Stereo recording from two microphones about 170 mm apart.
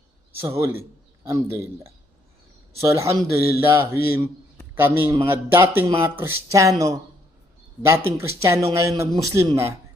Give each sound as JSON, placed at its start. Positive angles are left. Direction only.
{"t": 0.6, "sound": "speech", "side_deg": -15}